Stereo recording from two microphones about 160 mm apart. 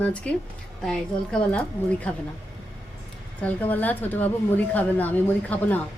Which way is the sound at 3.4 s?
10° left (ahead or behind).